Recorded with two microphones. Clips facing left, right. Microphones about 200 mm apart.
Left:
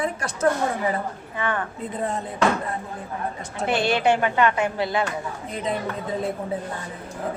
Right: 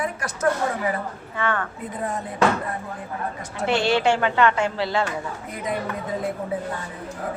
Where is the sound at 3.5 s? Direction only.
20° left (ahead or behind).